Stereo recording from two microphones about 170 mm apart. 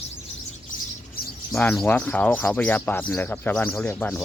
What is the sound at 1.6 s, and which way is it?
Speech, 10° left (ahead or behind).